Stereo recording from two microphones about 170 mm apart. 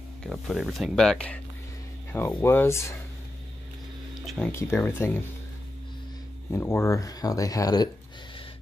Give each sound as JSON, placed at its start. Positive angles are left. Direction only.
{"t": 0.2, "sound": "speech", "side_deg": 0}
{"t": 4.5, "sound": "speech", "side_deg": 15}
{"t": 6.5, "sound": "speech", "side_deg": 15}